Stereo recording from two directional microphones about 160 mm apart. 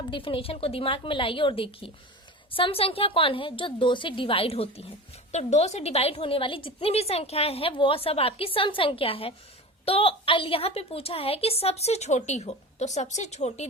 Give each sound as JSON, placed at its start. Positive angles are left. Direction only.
{"t": 0.1, "sound": "a woman's voice", "side_deg": 35}